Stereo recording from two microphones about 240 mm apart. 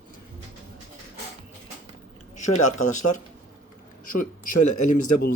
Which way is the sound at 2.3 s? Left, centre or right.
Left.